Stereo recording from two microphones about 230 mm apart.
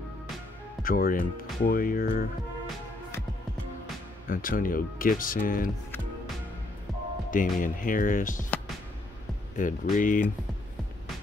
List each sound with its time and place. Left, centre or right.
0.8 s speech: left
4.3 s speech: left
7.2 s speech: left
9.6 s speech: left